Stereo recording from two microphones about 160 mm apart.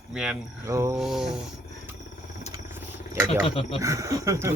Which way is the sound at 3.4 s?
35° left (ahead or behind).